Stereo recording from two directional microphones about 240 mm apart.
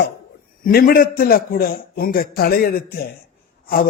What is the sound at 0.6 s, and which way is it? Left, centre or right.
Speech, left.